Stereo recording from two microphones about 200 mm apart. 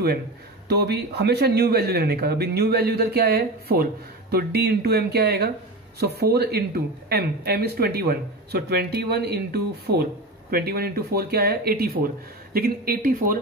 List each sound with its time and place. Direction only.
0.7 s speech: 55° right (ahead or behind)